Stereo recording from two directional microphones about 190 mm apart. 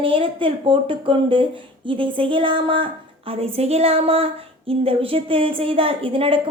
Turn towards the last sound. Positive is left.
turn(degrees=-30)  # may be behind; listen again after turning